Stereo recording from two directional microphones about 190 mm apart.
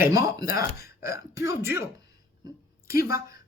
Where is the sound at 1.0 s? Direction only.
15° right (ahead or behind).